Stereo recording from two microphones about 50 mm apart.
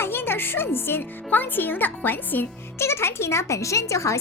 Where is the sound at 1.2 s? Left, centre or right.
Left.